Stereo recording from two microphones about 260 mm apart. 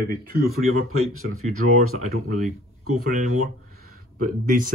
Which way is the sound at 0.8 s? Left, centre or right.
Right.